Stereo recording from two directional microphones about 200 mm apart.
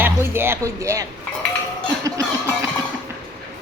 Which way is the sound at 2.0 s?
15° right (ahead or behind).